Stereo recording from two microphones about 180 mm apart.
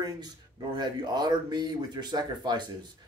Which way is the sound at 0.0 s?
20° right (ahead or behind).